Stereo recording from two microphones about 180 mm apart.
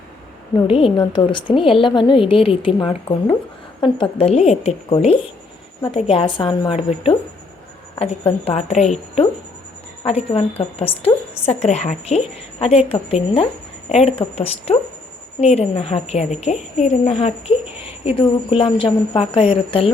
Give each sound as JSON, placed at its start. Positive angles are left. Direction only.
{"t": 0.9, "sound": "a woman's voice", "side_deg": 25}